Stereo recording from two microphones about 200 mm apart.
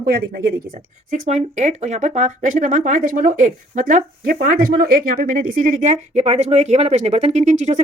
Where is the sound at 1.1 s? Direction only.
40° right (ahead or behind).